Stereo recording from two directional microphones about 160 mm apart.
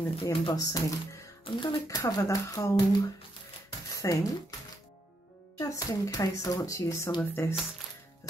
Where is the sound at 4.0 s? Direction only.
20° left (ahead or behind).